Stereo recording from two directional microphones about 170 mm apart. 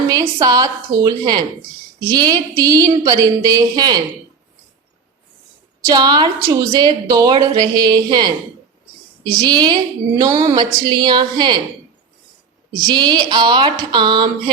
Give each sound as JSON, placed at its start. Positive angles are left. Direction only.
{"t": 0.1, "sound": "a woman's voice", "side_deg": -20}
{"t": 5.9, "sound": "a woman's voice", "side_deg": -25}
{"t": 9.4, "sound": "a woman's voice", "side_deg": -25}
{"t": 12.9, "sound": "a woman's voice", "side_deg": -25}